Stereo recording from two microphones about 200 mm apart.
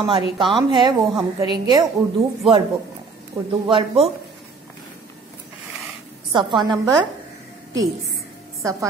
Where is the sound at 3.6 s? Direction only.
25° right (ahead or behind).